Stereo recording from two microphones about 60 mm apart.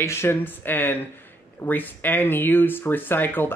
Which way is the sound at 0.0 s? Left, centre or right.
Left.